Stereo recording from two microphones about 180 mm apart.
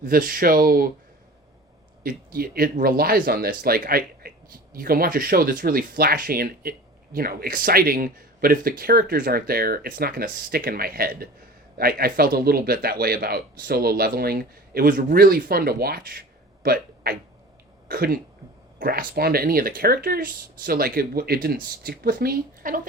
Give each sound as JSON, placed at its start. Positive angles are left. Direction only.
{"t": 0.0, "sound": "speech", "side_deg": -50}
{"t": 2.0, "sound": "a man's voice", "side_deg": -55}